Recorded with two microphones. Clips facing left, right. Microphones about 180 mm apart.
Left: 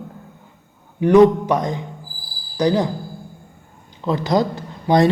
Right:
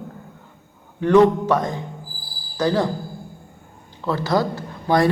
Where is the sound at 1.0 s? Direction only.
15° left (ahead or behind).